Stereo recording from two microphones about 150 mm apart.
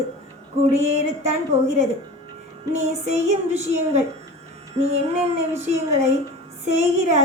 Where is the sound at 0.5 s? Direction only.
45° right (ahead or behind).